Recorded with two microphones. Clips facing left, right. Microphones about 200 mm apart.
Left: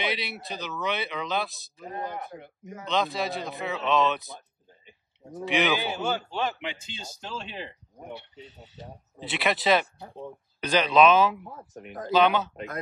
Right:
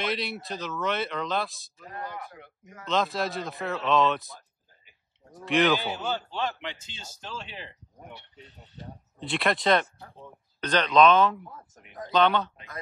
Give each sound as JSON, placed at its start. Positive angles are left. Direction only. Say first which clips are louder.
{"t": 0.0, "sound": "speech", "louder": "right 1 dB", "side_deg": 0}
{"t": 1.8, "sound": "a man's voice", "louder": "left 4 dB", "side_deg": 25}
{"t": 2.9, "sound": "speech", "louder": "even", "side_deg": 0}
{"t": 5.4, "sound": "a man's voice", "louder": "right 2 dB", "side_deg": 0}
{"t": 8.4, "sound": "a man's voice", "louder": "left 3 dB", "side_deg": 0}